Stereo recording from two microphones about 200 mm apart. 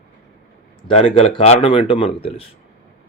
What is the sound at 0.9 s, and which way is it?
Speech, 30° left (ahead or behind).